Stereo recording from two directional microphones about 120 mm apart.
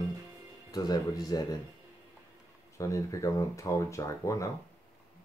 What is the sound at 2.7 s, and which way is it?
Speech, 25° left (ahead or behind).